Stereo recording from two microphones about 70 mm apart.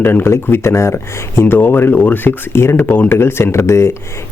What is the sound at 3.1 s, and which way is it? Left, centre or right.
Speech, left.